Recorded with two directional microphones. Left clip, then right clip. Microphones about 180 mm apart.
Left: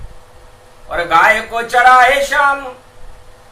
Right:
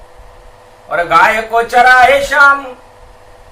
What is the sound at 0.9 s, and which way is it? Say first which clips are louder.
A man's voice: right 2 dB; 15° right (ahead or behind).